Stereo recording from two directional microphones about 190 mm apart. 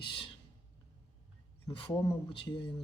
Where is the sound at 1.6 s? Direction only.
20° left (ahead or behind).